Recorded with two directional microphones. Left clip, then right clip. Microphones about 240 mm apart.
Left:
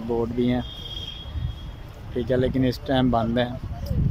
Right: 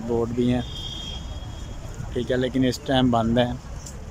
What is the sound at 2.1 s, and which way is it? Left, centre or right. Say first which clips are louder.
Speech: left 1 dB; centre.